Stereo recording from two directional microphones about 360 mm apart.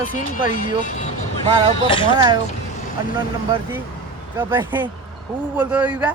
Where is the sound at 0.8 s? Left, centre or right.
Centre.